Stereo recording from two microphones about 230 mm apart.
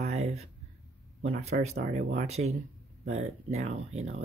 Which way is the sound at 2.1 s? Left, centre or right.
Right.